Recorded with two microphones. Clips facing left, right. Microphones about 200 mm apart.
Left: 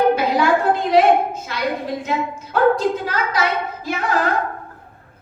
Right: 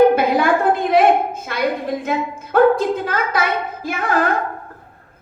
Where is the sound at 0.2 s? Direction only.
55° right (ahead or behind).